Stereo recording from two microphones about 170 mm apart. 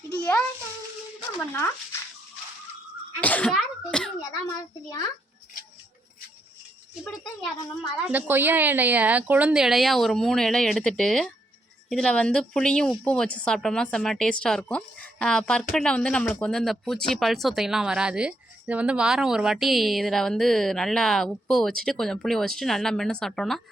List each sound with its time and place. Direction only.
0.2 s music: 20° left (ahead or behind)
3.2 s speech: 10° left (ahead or behind)
4.2 s a child's voice: 20° left (ahead or behind)
7.9 s speech: 5° right (ahead or behind)